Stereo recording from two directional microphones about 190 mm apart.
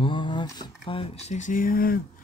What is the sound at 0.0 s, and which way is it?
Speech, 25° left (ahead or behind).